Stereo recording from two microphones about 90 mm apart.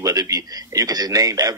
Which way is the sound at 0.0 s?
40° right (ahead or behind).